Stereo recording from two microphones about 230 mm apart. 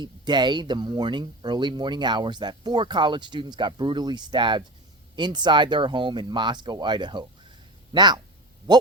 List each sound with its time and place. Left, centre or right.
0.0 s speech: centre